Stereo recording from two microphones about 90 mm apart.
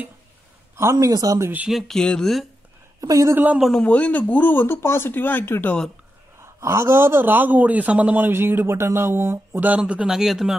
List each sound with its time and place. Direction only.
0.7 s speech: 35° right (ahead or behind)
1.7 s speech: centre (ahead or behind)
3.0 s speech: 40° right (ahead or behind)
3.7 s a man's voice: 15° left (ahead or behind)
6.4 s speech: 35° right (ahead or behind)
9.8 s speech: 10° right (ahead or behind)